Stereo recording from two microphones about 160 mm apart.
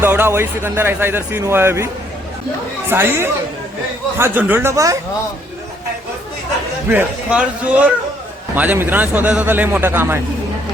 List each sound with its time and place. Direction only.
0.0 s speech: 15° right (ahead or behind)
2.9 s speech: 15° right (ahead or behind)
6.8 s speech: 10° right (ahead or behind)